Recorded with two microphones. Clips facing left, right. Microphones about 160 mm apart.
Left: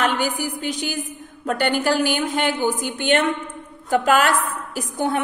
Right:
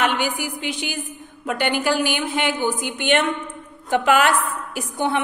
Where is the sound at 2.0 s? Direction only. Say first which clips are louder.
Left 1 dB; 45° left (ahead or behind).